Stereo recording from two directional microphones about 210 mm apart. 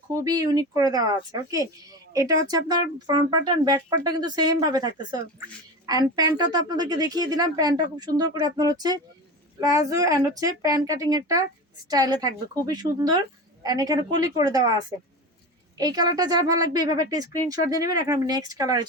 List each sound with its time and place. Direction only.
0.1 s speech: 15° right (ahead or behind)